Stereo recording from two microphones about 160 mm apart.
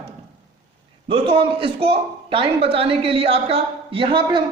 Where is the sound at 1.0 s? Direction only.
35° right (ahead or behind).